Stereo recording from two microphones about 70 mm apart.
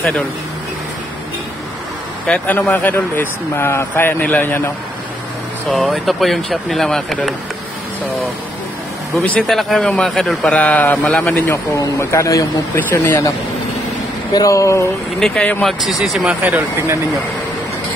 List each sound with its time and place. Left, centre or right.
2.2 s speech: centre
5.7 s speech: centre
9.5 s speech: centre
10.5 s speech: centre
12.0 s speech: left
14.3 s speech: left
15.1 s speech: centre
16.4 s speech: right